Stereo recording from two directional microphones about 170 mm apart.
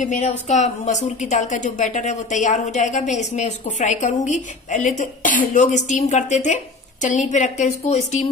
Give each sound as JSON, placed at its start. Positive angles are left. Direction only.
{"t": 0.0, "sound": "a woman's voice", "side_deg": 45}